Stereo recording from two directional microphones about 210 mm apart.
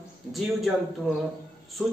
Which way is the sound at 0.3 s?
Centre (ahead or behind).